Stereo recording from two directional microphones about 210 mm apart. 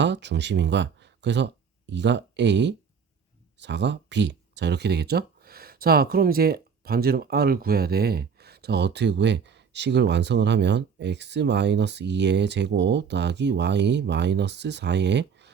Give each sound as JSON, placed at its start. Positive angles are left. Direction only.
{"t": 0.0, "sound": "speech", "side_deg": -55}